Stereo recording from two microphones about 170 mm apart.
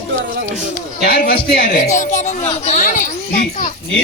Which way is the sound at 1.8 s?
50° left (ahead or behind).